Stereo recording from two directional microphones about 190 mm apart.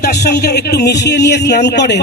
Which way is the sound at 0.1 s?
55° left (ahead or behind).